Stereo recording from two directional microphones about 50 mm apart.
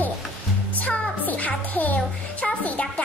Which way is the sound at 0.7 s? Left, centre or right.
Left.